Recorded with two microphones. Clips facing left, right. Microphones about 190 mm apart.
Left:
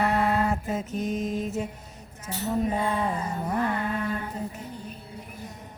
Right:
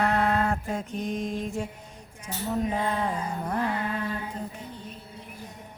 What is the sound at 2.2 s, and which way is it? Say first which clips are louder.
Speech: left 2 dB; 5° left (ahead or behind).